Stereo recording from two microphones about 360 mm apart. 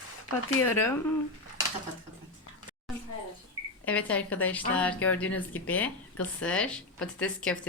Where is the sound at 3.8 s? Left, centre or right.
Centre.